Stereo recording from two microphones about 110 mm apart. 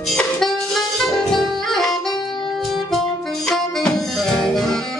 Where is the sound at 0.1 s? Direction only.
5° left (ahead or behind).